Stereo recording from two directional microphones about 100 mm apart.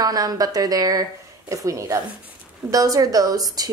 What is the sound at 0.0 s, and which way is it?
A woman's voice, 40° right (ahead or behind).